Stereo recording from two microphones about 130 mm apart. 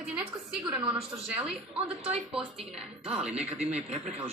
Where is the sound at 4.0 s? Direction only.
55° right (ahead or behind).